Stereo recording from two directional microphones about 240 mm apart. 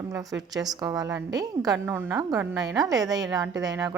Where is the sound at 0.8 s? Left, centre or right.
Centre.